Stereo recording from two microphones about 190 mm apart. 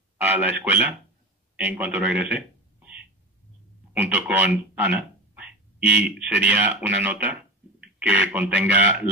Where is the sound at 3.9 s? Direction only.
10° right (ahead or behind).